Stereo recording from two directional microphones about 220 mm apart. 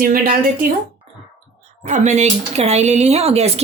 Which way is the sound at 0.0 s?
40° right (ahead or behind).